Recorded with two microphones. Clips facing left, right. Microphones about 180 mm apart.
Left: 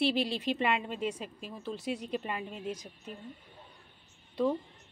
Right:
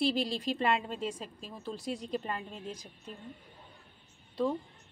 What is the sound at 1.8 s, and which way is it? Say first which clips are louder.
A woman's voice: even; 10° left (ahead or behind).